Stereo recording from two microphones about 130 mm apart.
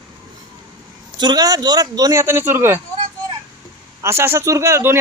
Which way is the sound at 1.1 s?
35° right (ahead or behind).